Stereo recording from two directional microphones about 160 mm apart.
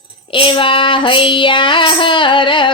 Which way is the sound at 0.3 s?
35° left (ahead or behind).